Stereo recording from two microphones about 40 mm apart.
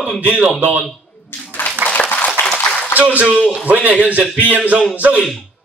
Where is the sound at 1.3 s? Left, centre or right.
Left.